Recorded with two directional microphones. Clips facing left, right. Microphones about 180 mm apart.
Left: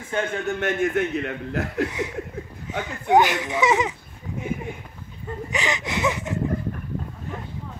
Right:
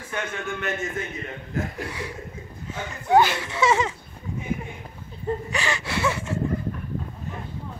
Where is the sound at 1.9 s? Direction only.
20° left (ahead or behind).